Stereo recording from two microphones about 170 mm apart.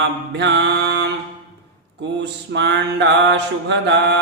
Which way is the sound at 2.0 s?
90° right.